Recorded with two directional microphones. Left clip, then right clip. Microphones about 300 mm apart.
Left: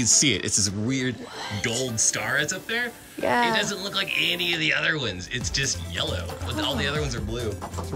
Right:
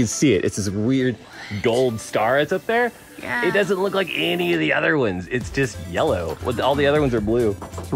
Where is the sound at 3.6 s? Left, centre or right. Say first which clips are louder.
Right 7 dB; centre.